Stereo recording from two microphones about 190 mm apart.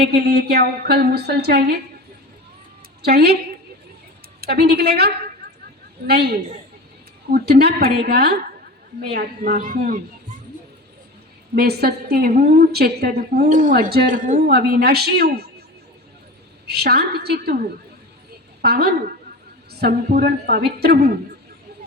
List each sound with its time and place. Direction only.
0.0 s a woman's voice: 55° right (ahead or behind)
3.0 s a woman's voice: 55° right (ahead or behind)
4.4 s a woman's voice: 55° right (ahead or behind)
11.5 s a woman's voice: 55° right (ahead or behind)
14.5 s a woman's voice: 55° right (ahead or behind)
16.6 s a woman's voice: 55° right (ahead or behind)
18.6 s a woman's voice: 55° right (ahead or behind)